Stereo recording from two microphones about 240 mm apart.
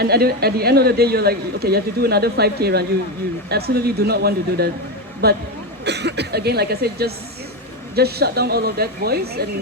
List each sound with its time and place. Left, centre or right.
0.0 s a man's voice: right